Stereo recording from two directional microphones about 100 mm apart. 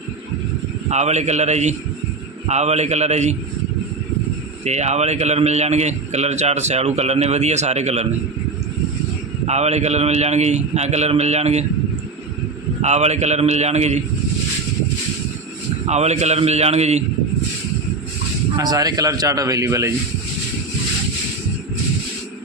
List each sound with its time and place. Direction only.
1.0 s a man's voice: 90° right
4.6 s a man's voice: 90° right
9.5 s a man's voice: 90° right
12.8 s a man's voice: 90° right
15.9 s a man's voice: 90° right
18.5 s a man's voice: 40° right (ahead or behind)